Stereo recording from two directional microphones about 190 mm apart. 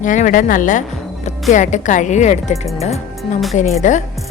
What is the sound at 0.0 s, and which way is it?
Speech, 40° left (ahead or behind).